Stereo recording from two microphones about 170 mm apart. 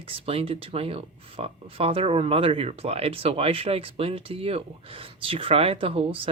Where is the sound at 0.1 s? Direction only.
35° right (ahead or behind).